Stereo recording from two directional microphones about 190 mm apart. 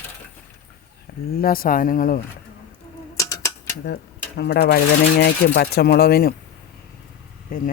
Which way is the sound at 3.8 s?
60° left (ahead or behind).